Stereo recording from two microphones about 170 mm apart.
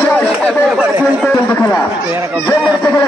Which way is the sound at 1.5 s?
15° left (ahead or behind).